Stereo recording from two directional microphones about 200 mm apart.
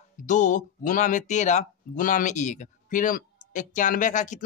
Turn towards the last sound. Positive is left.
turn(degrees=40)  # may be behind; listen again after turning